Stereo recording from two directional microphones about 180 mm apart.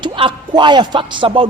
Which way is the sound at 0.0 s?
25° right (ahead or behind).